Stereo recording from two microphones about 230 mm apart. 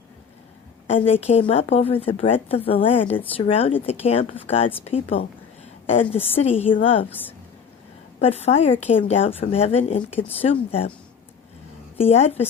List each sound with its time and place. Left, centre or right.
1.0 s a woman's voice: left
7.1 s speech: centre
8.2 s a woman's voice: left
11.9 s a woman's voice: left